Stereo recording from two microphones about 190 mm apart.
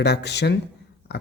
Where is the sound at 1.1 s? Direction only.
60° left (ahead or behind).